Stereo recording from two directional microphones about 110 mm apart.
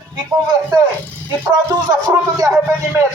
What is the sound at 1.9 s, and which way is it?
Speech, 35° right (ahead or behind).